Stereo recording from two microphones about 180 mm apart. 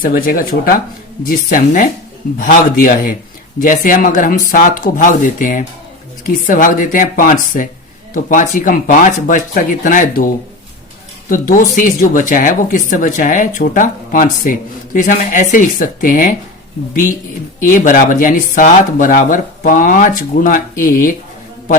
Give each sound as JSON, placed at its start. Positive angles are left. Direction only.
{"t": 0.0, "sound": "speech", "side_deg": 50}
{"t": 11.3, "sound": "speech", "side_deg": 50}